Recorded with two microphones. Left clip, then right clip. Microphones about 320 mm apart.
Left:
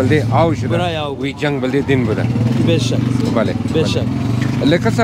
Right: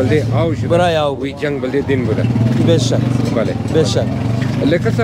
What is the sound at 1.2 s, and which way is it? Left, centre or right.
Speech, left.